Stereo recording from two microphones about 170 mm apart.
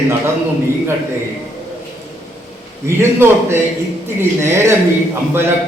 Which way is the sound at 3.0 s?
15° right (ahead or behind).